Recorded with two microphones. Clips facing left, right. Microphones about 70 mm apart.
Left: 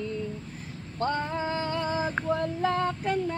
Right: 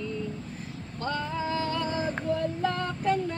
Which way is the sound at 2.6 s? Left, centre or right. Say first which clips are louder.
Left 2 dB; left.